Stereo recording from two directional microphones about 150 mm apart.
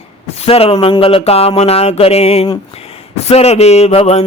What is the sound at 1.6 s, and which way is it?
Speech, 45° left (ahead or behind).